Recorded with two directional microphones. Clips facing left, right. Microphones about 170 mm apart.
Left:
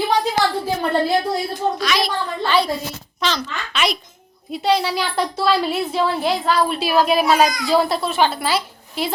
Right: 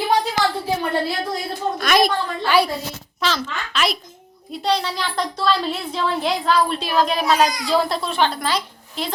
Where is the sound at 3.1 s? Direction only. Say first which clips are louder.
Even; centre (ahead or behind).